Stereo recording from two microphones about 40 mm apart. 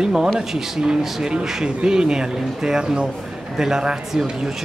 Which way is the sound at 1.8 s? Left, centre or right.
Centre.